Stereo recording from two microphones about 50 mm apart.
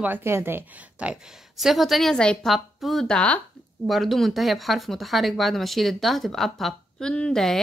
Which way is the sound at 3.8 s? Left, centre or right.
Centre.